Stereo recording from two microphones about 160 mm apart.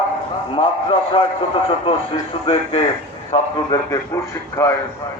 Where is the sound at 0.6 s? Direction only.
35° left (ahead or behind).